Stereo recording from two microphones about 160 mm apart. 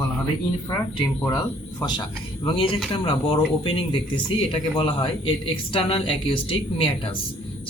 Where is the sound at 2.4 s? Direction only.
35° left (ahead or behind).